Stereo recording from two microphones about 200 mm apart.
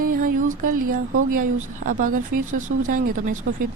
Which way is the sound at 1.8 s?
40° right (ahead or behind).